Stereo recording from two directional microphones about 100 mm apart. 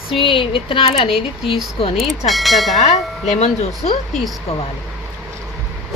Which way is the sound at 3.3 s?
90° left.